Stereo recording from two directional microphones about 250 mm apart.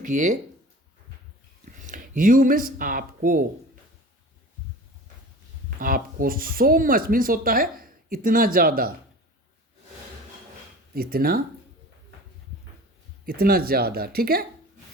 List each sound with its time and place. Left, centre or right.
0.0 s speech: right
1.8 s speech: right
5.8 s speech: right
10.9 s speech: right
13.2 s speech: right